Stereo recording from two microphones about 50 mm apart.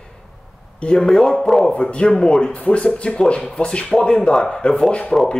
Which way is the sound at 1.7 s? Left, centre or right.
Left.